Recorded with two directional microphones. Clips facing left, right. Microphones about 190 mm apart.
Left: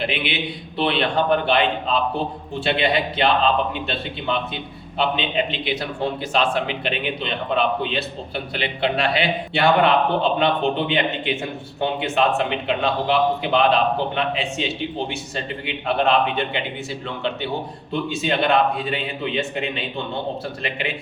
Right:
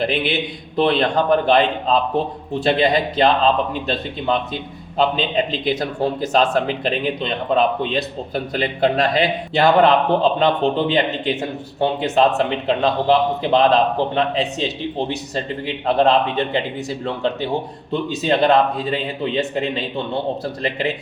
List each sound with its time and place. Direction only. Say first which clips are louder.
0.0 s a man's voice: right 4 dB; 40° right (ahead or behind)
17.9 s a man's voice: right 3 dB; 35° right (ahead or behind)